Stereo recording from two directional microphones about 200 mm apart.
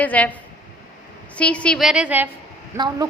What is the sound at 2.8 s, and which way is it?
Speech, 20° right (ahead or behind).